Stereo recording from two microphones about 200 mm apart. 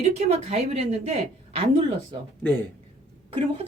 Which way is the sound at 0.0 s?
30° right (ahead or behind).